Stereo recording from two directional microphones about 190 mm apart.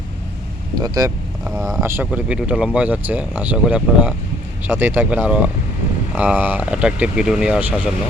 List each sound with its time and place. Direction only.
0.8 s speech: 20° right (ahead or behind)
1.5 s speech: centre (ahead or behind)
1.8 s speech: 10° right (ahead or behind)